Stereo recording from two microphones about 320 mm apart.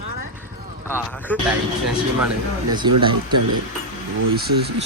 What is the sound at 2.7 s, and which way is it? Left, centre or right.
Speech, centre.